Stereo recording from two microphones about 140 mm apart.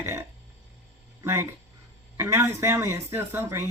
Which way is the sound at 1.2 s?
20° right (ahead or behind).